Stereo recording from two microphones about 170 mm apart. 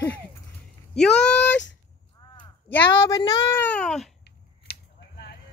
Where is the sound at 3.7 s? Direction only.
5° left (ahead or behind).